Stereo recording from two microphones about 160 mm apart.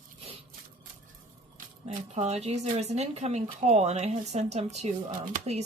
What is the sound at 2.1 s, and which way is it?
Speech, 45° right (ahead or behind).